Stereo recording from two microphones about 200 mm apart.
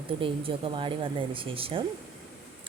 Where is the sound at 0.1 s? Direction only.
25° right (ahead or behind).